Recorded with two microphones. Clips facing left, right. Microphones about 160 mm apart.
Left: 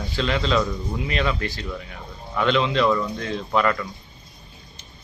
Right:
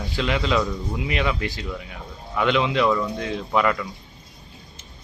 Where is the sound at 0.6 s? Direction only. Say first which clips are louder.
Even; centre (ahead or behind).